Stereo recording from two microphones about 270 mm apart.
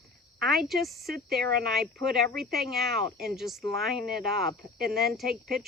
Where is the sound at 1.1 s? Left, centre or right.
Right.